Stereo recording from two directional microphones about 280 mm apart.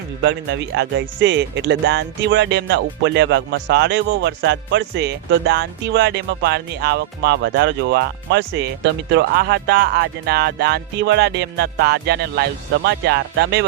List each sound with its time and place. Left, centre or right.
0.2 s speech: right